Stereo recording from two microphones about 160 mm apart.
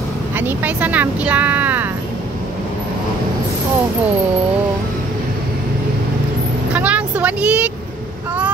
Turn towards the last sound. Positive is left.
turn(degrees=-10)  # may be behind; listen again after turning